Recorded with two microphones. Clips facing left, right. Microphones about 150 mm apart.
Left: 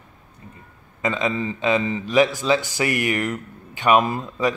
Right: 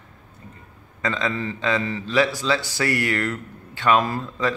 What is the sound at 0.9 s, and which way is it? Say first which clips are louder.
Speech: left 2 dB; 15° left (ahead or behind).